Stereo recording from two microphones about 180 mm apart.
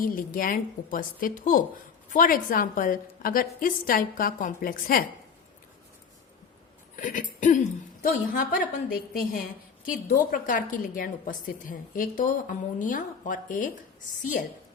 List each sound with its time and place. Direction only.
0.0 s a woman's voice: 50° left (ahead or behind)
6.9 s a woman's voice: 45° left (ahead or behind)